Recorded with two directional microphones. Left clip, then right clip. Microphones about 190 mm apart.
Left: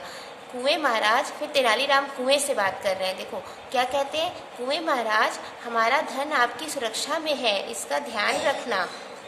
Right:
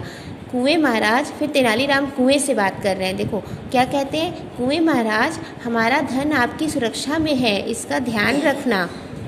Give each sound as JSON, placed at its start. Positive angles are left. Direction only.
{"t": 0.7, "sound": "a woman's voice", "side_deg": -25}